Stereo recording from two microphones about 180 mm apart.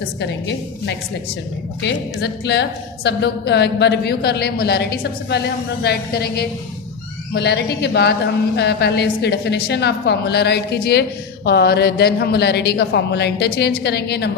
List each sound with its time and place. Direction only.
0.2 s a woman's voice: 70° left (ahead or behind)